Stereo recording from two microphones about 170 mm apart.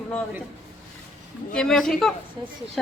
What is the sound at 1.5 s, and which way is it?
Speech, 5° left (ahead or behind).